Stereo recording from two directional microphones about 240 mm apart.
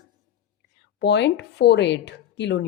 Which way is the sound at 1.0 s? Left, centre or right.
Left.